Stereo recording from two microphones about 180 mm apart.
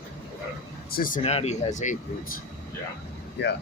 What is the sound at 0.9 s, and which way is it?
Speech, 50° left (ahead or behind).